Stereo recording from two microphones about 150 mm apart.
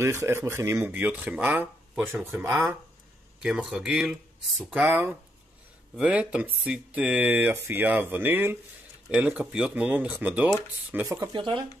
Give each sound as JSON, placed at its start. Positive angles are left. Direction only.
{"t": 0.0, "sound": "speech", "side_deg": -15}
{"t": 4.8, "sound": "speech", "side_deg": -15}
{"t": 11.1, "sound": "speech", "side_deg": -30}